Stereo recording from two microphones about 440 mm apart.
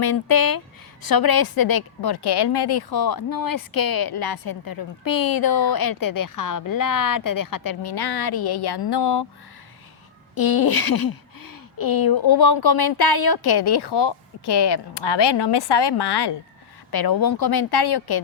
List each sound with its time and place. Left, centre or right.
0.0 s a woman's voice: left
10.3 s a woman's voice: left